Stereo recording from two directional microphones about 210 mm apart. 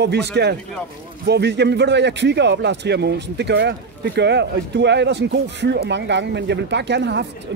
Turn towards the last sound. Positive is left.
turn(degrees=-55)  # may be behind; listen again after turning